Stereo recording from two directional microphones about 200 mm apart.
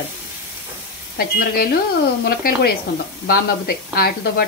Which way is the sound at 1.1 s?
50° left (ahead or behind).